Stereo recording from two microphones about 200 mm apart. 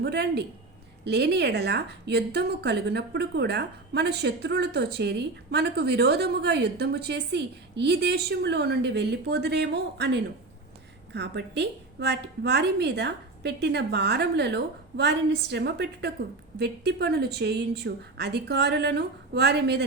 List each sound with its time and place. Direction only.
0.0 s a woman's voice: 55° right (ahead or behind)